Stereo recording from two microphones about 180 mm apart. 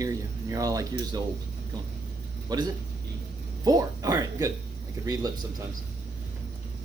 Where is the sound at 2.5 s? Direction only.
20° right (ahead or behind).